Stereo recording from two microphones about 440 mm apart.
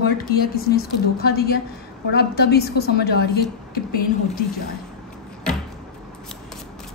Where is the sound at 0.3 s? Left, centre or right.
Centre.